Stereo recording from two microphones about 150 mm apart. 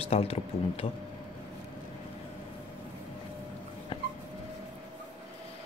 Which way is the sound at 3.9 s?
40° left (ahead or behind).